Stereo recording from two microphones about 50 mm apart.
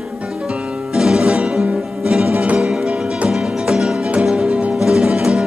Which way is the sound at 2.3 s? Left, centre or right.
Right.